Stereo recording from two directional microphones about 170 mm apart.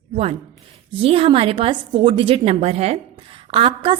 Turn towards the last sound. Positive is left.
turn(degrees=-35)  # may be behind; listen again after turning